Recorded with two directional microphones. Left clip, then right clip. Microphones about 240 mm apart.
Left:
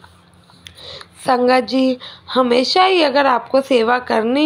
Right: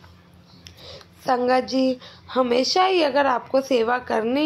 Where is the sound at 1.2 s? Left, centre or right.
Left.